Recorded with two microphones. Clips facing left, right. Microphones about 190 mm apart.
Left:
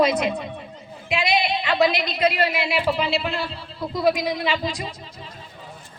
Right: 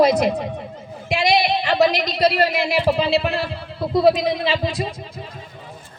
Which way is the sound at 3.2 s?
65° right (ahead or behind).